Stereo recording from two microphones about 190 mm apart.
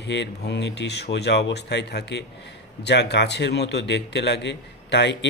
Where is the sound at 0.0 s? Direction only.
65° left (ahead or behind).